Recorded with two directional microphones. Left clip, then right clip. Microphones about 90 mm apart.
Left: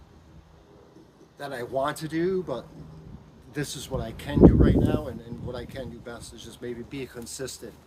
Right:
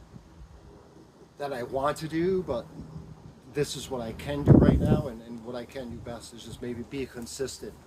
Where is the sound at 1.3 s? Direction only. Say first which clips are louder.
Left 2 dB; 80° left.